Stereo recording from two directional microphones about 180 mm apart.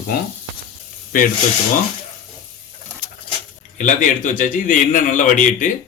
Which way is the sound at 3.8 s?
45° left (ahead or behind).